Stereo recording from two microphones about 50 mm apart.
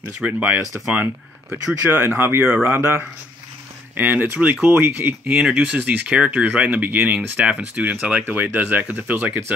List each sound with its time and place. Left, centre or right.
0.3 s speech: right
1.9 s speech: right
3.9 s speech: right
5.3 s speech: centre; by 7.2 s right
7.3 s speech: right